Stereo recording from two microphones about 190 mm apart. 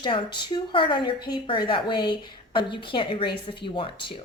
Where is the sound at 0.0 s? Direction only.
25° left (ahead or behind).